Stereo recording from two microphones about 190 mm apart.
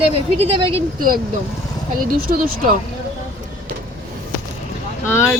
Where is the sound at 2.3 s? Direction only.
50° right (ahead or behind).